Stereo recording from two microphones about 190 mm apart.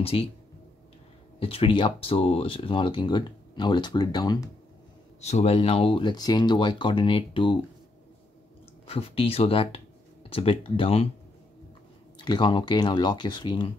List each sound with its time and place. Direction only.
0.0 s speech: 30° left (ahead or behind)
1.4 s speech: 30° left (ahead or behind)
5.2 s speech: 35° left (ahead or behind)
8.8 s speech: 30° left (ahead or behind)
12.3 s speech: 25° left (ahead or behind)